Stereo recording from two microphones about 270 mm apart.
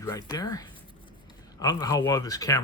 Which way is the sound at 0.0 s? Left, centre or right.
Centre.